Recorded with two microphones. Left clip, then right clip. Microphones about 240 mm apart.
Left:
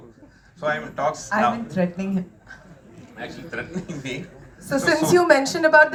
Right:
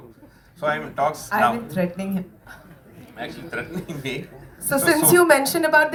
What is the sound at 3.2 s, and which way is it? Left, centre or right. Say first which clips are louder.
A woman's voice: right 1 dB; right.